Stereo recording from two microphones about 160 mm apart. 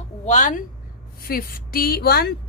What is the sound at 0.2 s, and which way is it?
Speech, 50° left (ahead or behind).